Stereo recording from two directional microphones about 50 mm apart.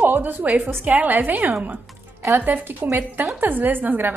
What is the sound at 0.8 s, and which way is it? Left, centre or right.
A woman's voice, right.